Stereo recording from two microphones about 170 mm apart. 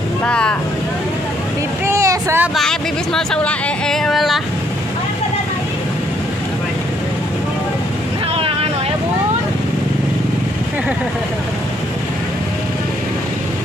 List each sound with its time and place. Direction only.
0.2 s speech: 5° left (ahead or behind)
1.9 s vehicle: 20° right (ahead or behind)
2.5 s speech: centre (ahead or behind)